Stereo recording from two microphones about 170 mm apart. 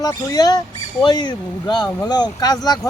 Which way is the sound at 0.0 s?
20° left (ahead or behind).